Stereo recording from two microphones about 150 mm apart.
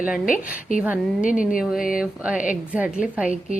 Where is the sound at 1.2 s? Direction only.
60° left (ahead or behind).